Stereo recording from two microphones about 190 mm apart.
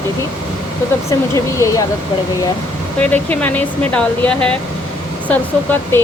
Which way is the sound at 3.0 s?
10° left (ahead or behind).